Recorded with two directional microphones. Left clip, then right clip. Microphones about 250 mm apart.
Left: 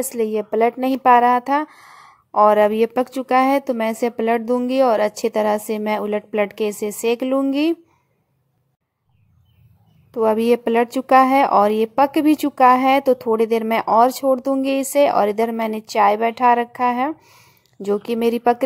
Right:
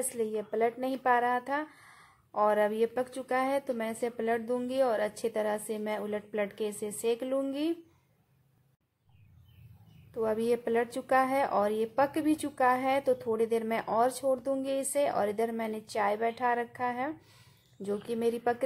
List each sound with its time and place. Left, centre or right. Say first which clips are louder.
0.1 s speech: left 12 dB; left
10.1 s speech: left 13 dB; left